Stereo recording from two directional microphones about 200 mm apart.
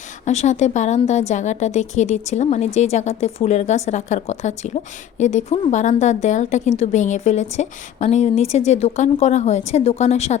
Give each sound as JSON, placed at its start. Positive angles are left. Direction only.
{"t": 0.3, "sound": "speech", "side_deg": 35}